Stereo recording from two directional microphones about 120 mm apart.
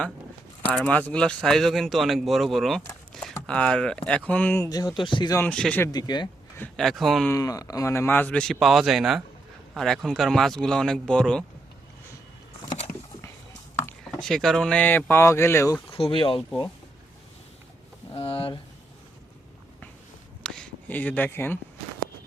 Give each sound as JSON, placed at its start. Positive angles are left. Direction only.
{"t": 0.7, "sound": "speech", "side_deg": 10}
{"t": 4.6, "sound": "speech", "side_deg": 30}
{"t": 5.5, "sound": "speech", "side_deg": 10}
{"t": 5.9, "sound": "speech", "side_deg": 35}
{"t": 6.6, "sound": "speech", "side_deg": 5}
{"t": 7.3, "sound": "speech", "side_deg": 30}
{"t": 14.2, "sound": "speech", "side_deg": 0}
{"t": 15.9, "sound": "speech", "side_deg": 45}
{"t": 18.2, "sound": "speech", "side_deg": 50}
{"t": 20.4, "sound": "a sound", "side_deg": 5}